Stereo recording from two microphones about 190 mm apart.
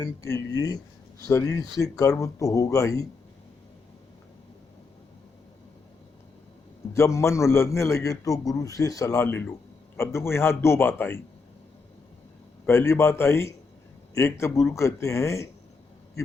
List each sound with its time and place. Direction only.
0.0 s a man's voice: 15° left (ahead or behind)
6.9 s a man's voice: 15° left (ahead or behind)
12.6 s a man's voice: 15° left (ahead or behind)